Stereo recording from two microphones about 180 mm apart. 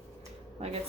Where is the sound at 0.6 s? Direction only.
35° right (ahead or behind).